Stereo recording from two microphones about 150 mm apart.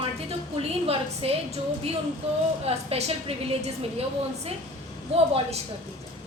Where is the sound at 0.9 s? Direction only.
40° right (ahead or behind).